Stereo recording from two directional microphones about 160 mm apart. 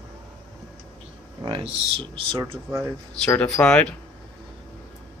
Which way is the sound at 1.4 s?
30° right (ahead or behind).